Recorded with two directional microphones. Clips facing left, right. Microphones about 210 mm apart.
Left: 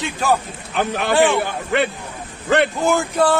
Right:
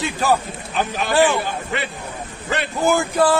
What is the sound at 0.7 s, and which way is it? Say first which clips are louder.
Speech: left 2 dB; 60° left (ahead or behind).